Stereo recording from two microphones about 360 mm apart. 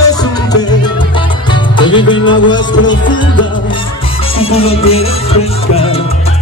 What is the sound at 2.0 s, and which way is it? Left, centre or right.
Music, centre.